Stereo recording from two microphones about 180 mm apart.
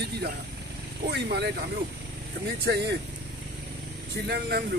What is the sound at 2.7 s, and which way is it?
Speech, 60° right (ahead or behind).